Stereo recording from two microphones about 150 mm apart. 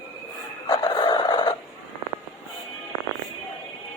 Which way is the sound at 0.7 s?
30° left (ahead or behind).